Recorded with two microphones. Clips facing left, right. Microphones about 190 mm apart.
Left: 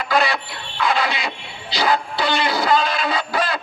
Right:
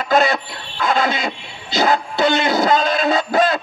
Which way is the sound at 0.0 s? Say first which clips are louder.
Right 4 dB; 45° right (ahead or behind).